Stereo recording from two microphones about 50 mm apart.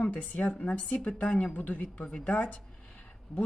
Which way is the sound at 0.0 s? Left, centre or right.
Left.